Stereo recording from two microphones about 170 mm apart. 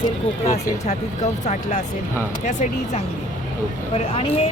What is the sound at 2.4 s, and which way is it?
A woman's voice, 45° left (ahead or behind).